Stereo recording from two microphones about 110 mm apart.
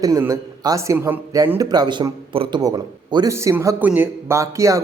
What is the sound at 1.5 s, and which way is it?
Speech, 40° right (ahead or behind).